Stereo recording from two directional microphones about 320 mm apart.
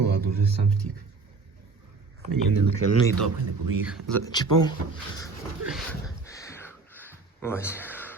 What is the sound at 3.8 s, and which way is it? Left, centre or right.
Speech, centre.